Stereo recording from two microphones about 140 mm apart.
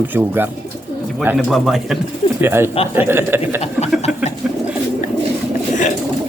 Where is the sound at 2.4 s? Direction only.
15° right (ahead or behind).